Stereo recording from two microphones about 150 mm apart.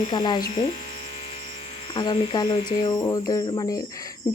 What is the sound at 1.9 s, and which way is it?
Speech, 30° left (ahead or behind).